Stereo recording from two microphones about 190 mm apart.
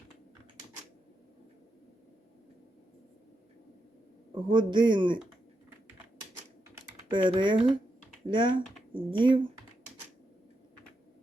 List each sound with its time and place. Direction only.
4.4 s speech: 25° right (ahead or behind)
7.1 s speech: 25° right (ahead or behind)